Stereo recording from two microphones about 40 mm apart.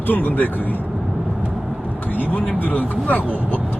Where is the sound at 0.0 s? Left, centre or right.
Left.